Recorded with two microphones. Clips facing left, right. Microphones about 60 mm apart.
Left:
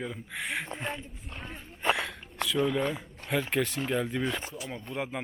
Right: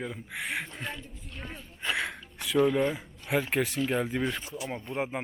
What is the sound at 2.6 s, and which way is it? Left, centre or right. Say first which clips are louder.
A man's voice: right 4 dB; centre.